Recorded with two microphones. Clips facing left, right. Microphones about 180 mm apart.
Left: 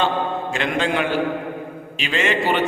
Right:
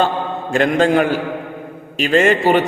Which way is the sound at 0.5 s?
45° right (ahead or behind).